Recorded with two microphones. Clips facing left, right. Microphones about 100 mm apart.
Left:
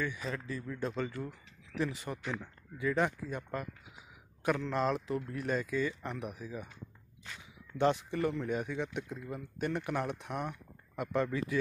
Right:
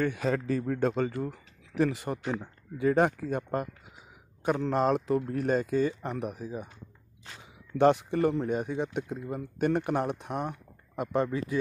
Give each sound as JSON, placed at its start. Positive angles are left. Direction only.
{"t": 0.0, "sound": "a man's voice", "side_deg": -70}
{"t": 1.2, "sound": "speech", "side_deg": -50}
{"t": 2.2, "sound": "speech", "side_deg": -30}
{"t": 2.8, "sound": "speech", "side_deg": -50}
{"t": 4.4, "sound": "speech", "side_deg": -30}
{"t": 4.6, "sound": "speech", "side_deg": -45}
{"t": 7.7, "sound": "speech", "side_deg": -50}